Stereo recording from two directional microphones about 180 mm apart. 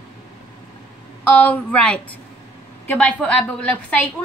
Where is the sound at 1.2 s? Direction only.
10° left (ahead or behind).